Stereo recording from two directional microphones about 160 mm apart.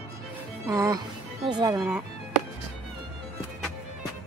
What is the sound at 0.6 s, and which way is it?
Speech, 20° right (ahead or behind).